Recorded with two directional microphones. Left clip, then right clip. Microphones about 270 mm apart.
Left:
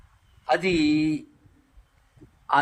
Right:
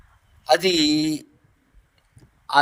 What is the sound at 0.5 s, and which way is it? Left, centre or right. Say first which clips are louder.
Speech: right 4 dB; right.